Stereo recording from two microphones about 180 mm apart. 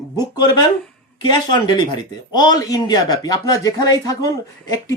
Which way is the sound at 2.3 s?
25° left (ahead or behind).